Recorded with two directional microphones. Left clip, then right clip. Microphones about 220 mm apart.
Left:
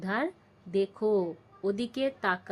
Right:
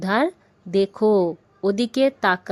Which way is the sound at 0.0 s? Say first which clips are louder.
Right 10 dB; 40° right (ahead or behind).